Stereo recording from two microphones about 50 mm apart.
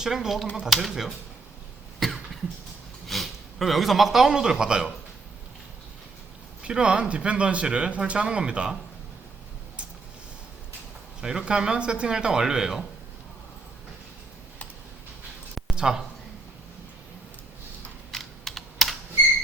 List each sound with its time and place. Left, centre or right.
0.0 s speech: centre
2.0 s cough: centre
3.1 s speech: centre
6.6 s speech: centre
11.2 s speech: centre
15.7 s a sound: centre
18.1 s computer keyboard: centre